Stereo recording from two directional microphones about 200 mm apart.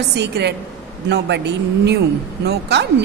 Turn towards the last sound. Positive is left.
turn(degrees=-60)  # may be behind; listen again after turning